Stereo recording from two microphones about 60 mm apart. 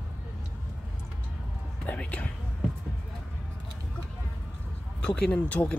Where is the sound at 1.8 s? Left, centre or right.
Left.